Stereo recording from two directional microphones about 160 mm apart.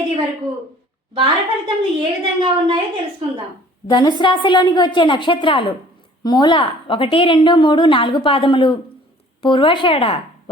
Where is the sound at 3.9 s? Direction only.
30° left (ahead or behind).